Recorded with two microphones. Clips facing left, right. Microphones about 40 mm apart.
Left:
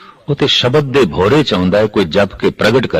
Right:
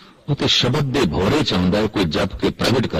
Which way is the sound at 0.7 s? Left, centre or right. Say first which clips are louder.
Left 8 dB; left.